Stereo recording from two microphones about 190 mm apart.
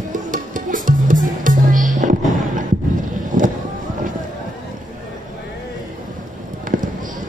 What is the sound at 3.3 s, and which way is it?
Vehicle, 45° right (ahead or behind).